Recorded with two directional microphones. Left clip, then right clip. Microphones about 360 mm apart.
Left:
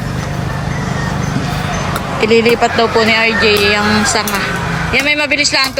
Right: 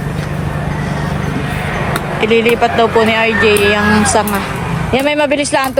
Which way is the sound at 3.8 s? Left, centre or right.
Centre.